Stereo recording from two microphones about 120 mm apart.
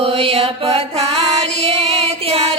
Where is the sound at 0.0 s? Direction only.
50° right (ahead or behind).